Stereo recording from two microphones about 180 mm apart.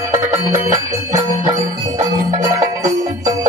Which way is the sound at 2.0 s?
20° right (ahead or behind).